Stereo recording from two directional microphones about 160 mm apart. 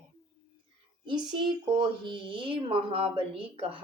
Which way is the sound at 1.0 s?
30° right (ahead or behind).